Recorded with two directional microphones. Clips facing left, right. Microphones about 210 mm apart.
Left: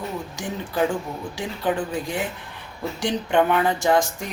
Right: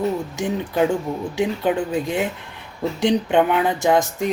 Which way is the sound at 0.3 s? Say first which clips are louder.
Right 1 dB; 20° right (ahead or behind).